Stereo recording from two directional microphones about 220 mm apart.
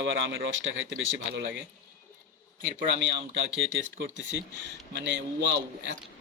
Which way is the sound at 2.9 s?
50° right (ahead or behind).